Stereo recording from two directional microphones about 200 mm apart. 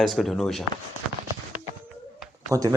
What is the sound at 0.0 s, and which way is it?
Speech, centre (ahead or behind).